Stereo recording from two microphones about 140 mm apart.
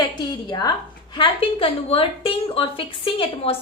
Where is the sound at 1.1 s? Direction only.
40° left (ahead or behind).